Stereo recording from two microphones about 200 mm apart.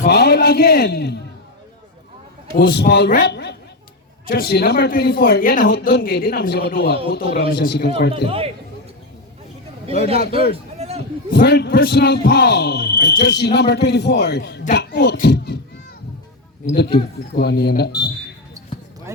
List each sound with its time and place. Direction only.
0.1 s a man's voice: 55° left (ahead or behind)
2.6 s a man's voice: 55° left (ahead or behind)
5.6 s speech: 55° left (ahead or behind)
8.3 s speech: 30° right (ahead or behind)
10.5 s a sound: 30° right (ahead or behind)
11.3 s a man's voice: 55° left (ahead or behind)
16.7 s a man's voice: 55° left (ahead or behind)